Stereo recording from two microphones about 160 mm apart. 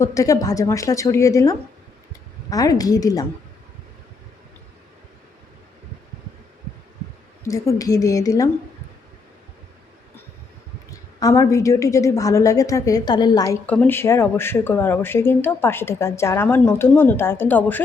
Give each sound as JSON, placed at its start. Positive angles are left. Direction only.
{"t": 0.0, "sound": "a woman's voice", "side_deg": 20}
{"t": 7.4, "sound": "a woman's voice", "side_deg": 20}
{"t": 10.9, "sound": "a woman's voice", "side_deg": 20}
{"t": 13.7, "sound": "speech", "side_deg": 10}